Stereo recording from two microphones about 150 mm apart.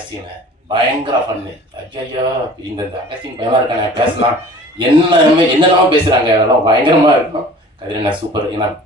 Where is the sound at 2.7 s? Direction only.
35° right (ahead or behind).